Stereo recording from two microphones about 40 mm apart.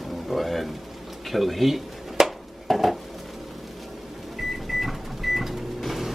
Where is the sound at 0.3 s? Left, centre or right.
Centre.